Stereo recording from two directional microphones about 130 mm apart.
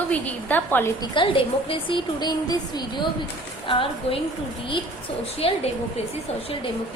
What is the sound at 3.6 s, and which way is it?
Speech, 40° left (ahead or behind).